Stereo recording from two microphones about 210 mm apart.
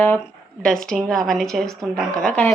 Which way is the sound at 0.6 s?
5° left (ahead or behind).